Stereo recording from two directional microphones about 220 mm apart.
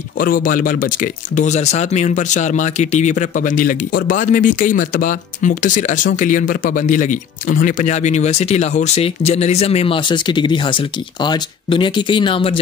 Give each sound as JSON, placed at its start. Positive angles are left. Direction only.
{"t": 0.2, "sound": "speech", "side_deg": 40}